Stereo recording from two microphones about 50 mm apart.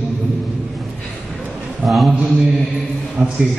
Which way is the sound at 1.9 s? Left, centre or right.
Centre.